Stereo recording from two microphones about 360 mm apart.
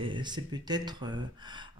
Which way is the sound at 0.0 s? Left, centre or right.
Centre.